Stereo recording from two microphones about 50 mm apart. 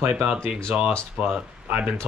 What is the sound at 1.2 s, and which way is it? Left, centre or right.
Speech, right.